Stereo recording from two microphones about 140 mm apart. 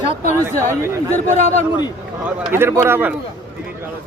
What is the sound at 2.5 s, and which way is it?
Speech, 15° right (ahead or behind).